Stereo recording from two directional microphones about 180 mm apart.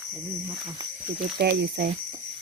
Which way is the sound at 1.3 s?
65° right (ahead or behind).